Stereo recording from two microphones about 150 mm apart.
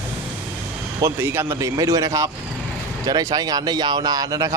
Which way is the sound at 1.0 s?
15° right (ahead or behind).